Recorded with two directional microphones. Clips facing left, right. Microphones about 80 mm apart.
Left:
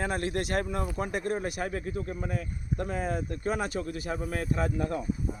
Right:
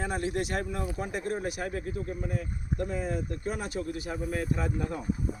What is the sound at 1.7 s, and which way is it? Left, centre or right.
Speech, left.